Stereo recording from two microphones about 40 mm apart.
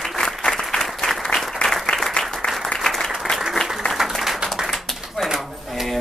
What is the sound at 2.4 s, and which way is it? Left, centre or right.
Applause, left.